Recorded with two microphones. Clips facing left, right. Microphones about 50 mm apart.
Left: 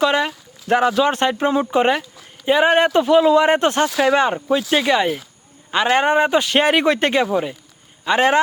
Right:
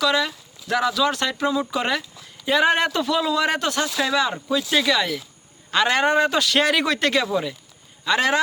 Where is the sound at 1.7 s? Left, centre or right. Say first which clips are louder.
Left 7 dB; left.